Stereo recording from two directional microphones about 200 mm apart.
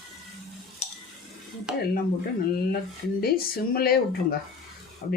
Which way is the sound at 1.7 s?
5° right (ahead or behind).